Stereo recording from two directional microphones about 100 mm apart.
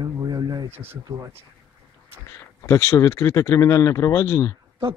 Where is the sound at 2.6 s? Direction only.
30° left (ahead or behind).